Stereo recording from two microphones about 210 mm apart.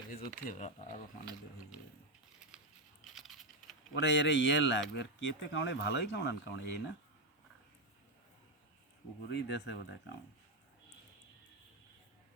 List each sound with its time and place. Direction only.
0.4 s speech: 35° left (ahead or behind)
3.0 s computer keyboard: centre (ahead or behind)
3.9 s speech: 55° left (ahead or behind)
9.3 s speech: 55° left (ahead or behind)